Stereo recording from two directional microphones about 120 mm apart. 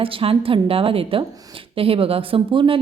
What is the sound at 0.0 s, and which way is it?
A woman's voice, 50° right (ahead or behind).